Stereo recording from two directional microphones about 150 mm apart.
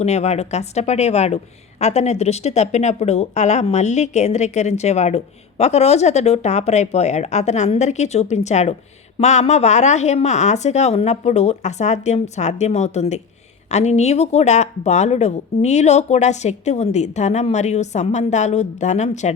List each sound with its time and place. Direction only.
0.0 s a woman's voice: 45° left (ahead or behind)